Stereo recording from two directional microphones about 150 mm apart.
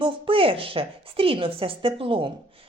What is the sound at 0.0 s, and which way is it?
A woman's voice, 35° right (ahead or behind).